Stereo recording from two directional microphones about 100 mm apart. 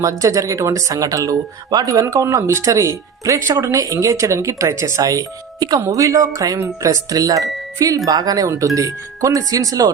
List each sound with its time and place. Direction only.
0.0 s speech: 30° right (ahead or behind)